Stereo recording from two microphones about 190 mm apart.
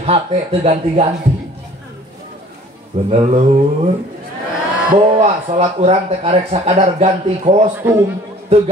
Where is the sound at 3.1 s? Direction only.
30° right (ahead or behind).